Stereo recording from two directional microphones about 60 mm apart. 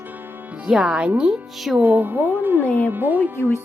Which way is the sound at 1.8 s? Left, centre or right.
Right.